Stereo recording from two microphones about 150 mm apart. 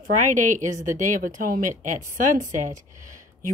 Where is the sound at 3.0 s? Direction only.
60° right (ahead or behind).